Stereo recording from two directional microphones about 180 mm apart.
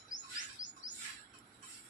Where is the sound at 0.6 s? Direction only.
90° left.